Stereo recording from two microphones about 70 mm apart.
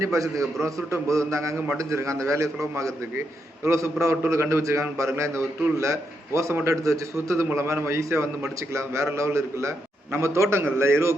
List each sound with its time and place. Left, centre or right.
0.0 s a man's voice: right